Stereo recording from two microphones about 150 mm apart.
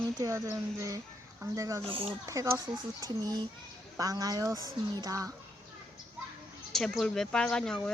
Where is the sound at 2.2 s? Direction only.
20° right (ahead or behind).